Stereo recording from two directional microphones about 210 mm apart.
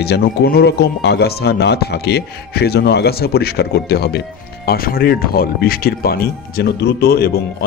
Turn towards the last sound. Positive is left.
turn(degrees=50)  # may be behind; listen again after turning